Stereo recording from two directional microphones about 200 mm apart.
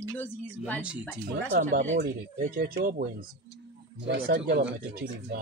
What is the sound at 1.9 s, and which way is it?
Speech, 55° right (ahead or behind).